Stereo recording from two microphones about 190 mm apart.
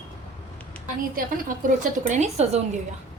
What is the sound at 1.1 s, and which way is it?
Speech, 50° right (ahead or behind).